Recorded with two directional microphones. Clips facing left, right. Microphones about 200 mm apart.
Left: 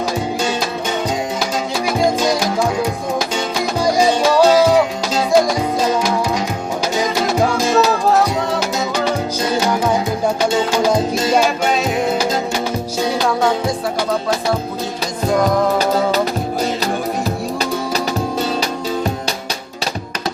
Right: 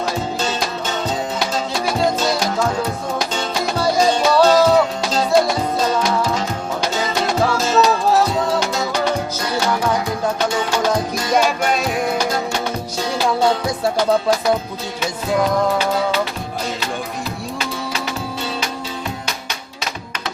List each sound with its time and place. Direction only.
1.9 s music: 10° left (ahead or behind)
7.5 s music: 15° left (ahead or behind)
9.6 s music: 15° left (ahead or behind)
11.1 s music: 25° left (ahead or behind)